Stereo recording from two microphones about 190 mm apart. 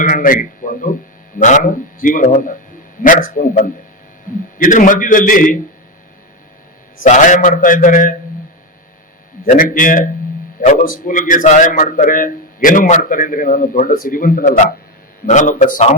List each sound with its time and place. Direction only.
0.0 s a man's voice: 45° left (ahead or behind)
7.0 s a man's voice: 40° left (ahead or behind)
9.5 s a man's voice: 45° left (ahead or behind)